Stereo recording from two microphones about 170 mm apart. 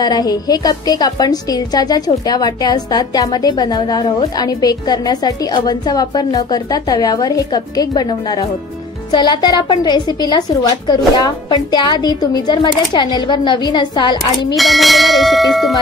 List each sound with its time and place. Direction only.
0.0 s a woman's voice: 25° left (ahead or behind)
14.5 s speech: centre (ahead or behind)